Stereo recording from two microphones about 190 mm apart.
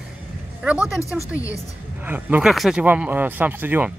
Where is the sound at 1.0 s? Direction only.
15° left (ahead or behind).